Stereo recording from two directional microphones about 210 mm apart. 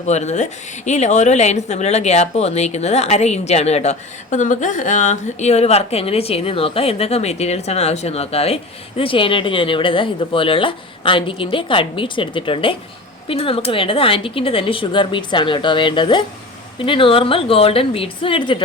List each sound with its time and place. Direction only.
0.0 s a woman's voice: 30° left (ahead or behind)